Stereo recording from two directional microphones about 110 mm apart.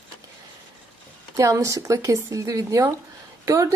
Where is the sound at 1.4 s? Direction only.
30° right (ahead or behind).